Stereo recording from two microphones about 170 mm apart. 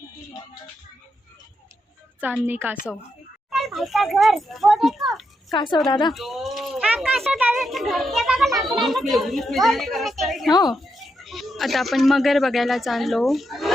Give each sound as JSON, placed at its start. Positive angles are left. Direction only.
{"t": 2.2, "sound": "speech", "side_deg": -10}
{"t": 3.5, "sound": "a child's voice", "side_deg": 0}
{"t": 5.5, "sound": "a woman's voice", "side_deg": 25}
{"t": 6.1, "sound": "speech", "side_deg": 0}